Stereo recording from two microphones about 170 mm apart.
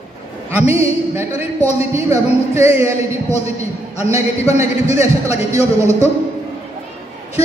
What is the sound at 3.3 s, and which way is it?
Speech, 40° left (ahead or behind).